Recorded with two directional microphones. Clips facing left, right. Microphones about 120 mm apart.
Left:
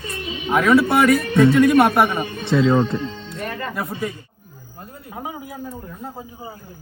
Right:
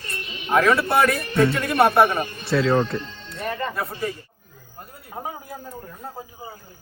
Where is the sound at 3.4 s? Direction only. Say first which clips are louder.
Right 2 dB; 30° right (ahead or behind).